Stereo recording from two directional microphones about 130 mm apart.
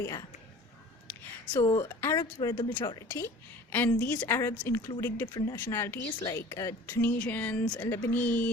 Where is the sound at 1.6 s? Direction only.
45° left (ahead or behind).